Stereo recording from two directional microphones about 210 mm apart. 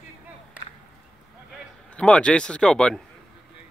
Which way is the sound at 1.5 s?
5° left (ahead or behind).